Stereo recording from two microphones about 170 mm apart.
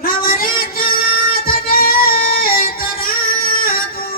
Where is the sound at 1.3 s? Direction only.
60° left (ahead or behind).